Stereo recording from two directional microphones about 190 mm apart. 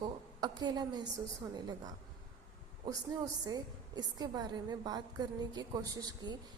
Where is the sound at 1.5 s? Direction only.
20° right (ahead or behind).